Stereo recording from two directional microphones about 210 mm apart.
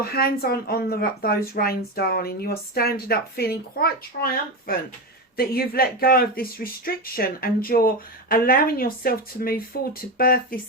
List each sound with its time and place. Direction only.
0.0 s speech: 45° left (ahead or behind)